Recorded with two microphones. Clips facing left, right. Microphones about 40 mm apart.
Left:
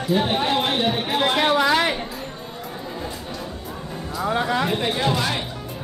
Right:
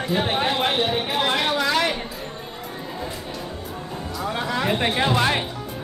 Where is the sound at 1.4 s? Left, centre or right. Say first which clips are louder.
Left 3 dB; centre.